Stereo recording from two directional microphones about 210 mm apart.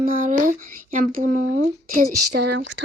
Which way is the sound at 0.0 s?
40° right (ahead or behind).